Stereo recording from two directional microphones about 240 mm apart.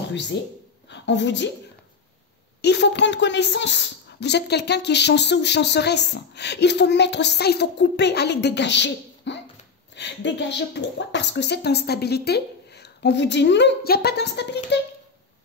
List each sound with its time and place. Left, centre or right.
0.1 s a woman's voice: left
2.6 s a woman's voice: left